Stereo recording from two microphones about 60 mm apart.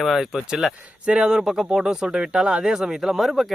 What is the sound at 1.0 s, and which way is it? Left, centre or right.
Speech, centre.